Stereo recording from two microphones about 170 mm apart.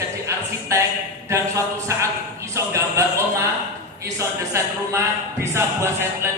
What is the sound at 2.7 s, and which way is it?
A man's voice, 15° right (ahead or behind).